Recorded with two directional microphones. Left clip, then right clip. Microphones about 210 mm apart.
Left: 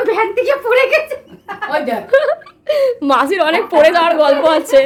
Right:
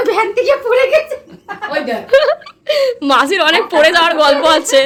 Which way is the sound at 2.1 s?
10° right (ahead or behind).